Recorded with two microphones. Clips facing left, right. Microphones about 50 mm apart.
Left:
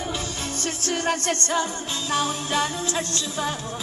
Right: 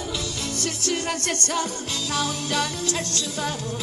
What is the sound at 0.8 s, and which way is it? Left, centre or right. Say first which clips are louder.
Music: left 3 dB; left.